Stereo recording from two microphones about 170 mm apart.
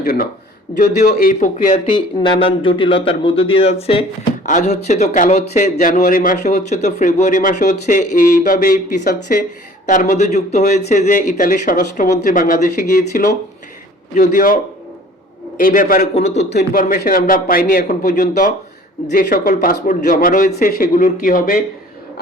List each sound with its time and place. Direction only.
0.0 s speech: 60° left (ahead or behind)
0.7 s a man's voice: 25° left (ahead or behind)
1.2 s speech: 50° left (ahead or behind)
2.0 s a man's voice: 30° left (ahead or behind); by 16.0 s 50° left (ahead or behind)
16.1 s speech: 40° left (ahead or behind)
16.7 s a man's voice: 55° left (ahead or behind)